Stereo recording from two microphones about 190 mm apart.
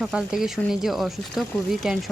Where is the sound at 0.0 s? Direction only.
5° right (ahead or behind).